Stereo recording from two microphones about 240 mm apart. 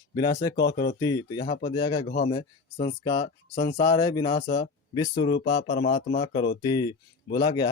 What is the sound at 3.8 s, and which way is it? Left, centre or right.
Speech, centre.